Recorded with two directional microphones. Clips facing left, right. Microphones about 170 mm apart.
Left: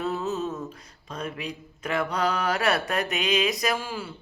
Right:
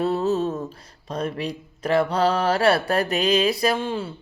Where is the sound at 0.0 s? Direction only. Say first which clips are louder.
Right 6 dB; 35° right (ahead or behind).